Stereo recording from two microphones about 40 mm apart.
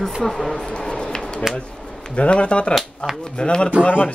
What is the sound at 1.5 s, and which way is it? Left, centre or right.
Speech, centre.